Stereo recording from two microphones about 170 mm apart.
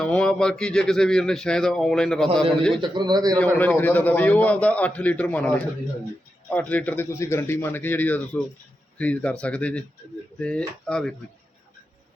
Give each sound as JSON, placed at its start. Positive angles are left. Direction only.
{"t": 0.0, "sound": "speech", "side_deg": 5}
{"t": 2.8, "sound": "speech", "side_deg": -25}
{"t": 3.3, "sound": "a man's voice", "side_deg": 5}
{"t": 6.5, "sound": "a man's voice", "side_deg": 10}
{"t": 10.8, "sound": "speech", "side_deg": 5}